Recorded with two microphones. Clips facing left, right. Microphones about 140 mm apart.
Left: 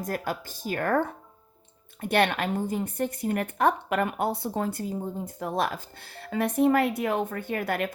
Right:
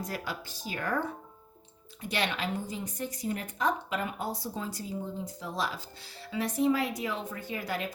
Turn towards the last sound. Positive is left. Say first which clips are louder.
# left 6 dB
turn(degrees=60)  # may be behind; listen again after turning